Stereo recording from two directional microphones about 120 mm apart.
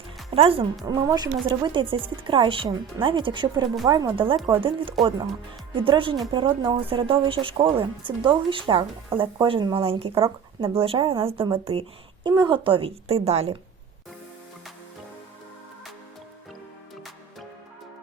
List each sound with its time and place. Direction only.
0.3 s speech: 50° right (ahead or behind)
0.9 s speech: 35° right (ahead or behind); by 13.6 s 60° right (ahead or behind)